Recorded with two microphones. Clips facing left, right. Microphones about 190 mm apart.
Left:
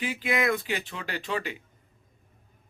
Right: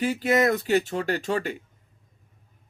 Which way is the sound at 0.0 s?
45° right (ahead or behind).